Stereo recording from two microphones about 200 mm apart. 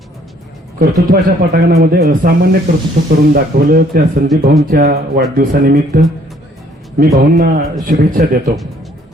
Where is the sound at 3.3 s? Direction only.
50° right (ahead or behind).